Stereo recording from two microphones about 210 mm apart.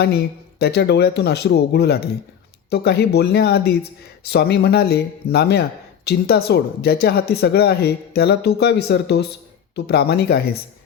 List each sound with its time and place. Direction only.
0.6 s speech: 50° left (ahead or behind)